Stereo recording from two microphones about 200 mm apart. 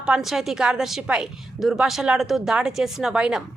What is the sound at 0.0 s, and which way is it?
A woman's voice, 5° right (ahead or behind).